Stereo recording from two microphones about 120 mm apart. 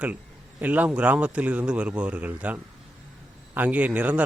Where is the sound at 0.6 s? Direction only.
15° right (ahead or behind).